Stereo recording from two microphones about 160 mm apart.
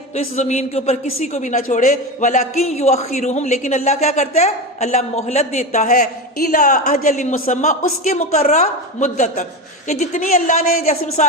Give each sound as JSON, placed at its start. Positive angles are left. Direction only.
{"t": 0.3, "sound": "a man's voice", "side_deg": 45}